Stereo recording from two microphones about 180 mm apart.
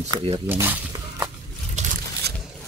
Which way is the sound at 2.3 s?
65° right (ahead or behind).